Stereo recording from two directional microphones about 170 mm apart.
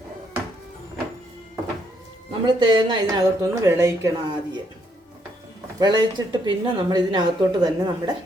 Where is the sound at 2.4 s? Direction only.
25° right (ahead or behind).